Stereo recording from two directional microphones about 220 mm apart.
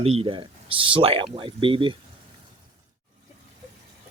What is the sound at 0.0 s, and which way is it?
Speech, 25° right (ahead or behind).